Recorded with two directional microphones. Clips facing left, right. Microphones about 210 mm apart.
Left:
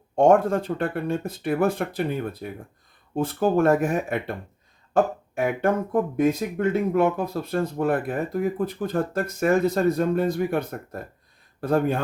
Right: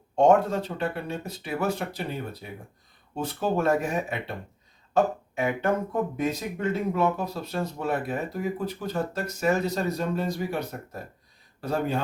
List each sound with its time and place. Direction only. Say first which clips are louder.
0.2 s speech: left 2 dB; 50° left (ahead or behind)
5.9 s speech: left 6 dB; 50° left (ahead or behind)